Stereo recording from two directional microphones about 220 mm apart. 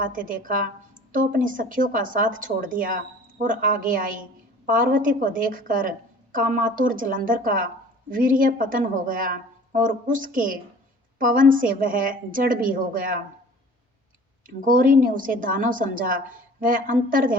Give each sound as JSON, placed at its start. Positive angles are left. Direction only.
{"t": 0.0, "sound": "a woman's voice", "side_deg": -40}
{"t": 14.4, "sound": "a woman's voice", "side_deg": -40}